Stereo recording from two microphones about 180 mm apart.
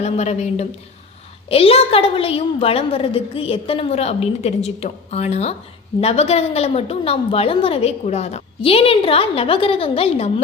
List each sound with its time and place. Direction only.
0.0 s a woman's voice: 35° left (ahead or behind)